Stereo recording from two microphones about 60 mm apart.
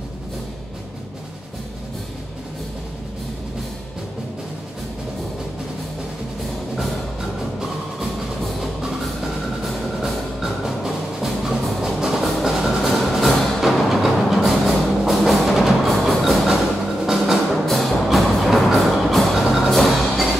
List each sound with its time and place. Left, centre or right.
8.5 s music: centre